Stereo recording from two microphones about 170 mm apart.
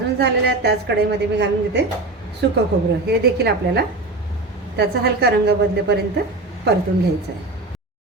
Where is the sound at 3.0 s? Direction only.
75° right (ahead or behind).